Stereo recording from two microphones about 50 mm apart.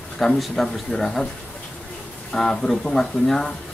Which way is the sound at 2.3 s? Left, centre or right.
Centre.